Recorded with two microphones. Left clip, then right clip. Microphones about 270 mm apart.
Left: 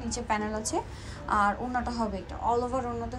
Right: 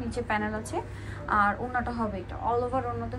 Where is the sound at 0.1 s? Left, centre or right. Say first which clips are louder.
Even; centre.